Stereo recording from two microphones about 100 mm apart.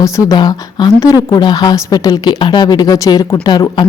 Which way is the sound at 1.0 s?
35° left (ahead or behind).